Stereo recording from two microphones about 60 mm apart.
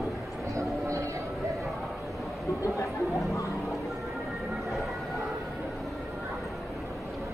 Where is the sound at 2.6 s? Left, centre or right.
Left.